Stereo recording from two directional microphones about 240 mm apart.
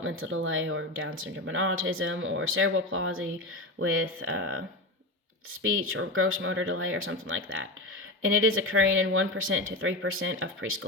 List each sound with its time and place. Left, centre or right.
0.0 s speech: right
5.6 s speech: right